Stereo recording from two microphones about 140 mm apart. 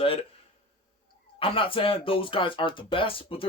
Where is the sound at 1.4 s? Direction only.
40° left (ahead or behind).